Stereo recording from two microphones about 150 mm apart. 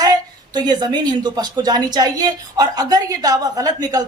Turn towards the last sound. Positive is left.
turn(degrees=-25)  # may be behind; listen again after turning